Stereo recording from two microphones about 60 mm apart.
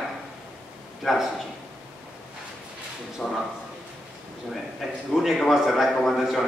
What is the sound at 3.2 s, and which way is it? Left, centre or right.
Speech, left.